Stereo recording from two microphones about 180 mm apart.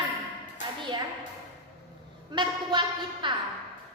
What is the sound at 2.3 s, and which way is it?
Speech, 25° right (ahead or behind).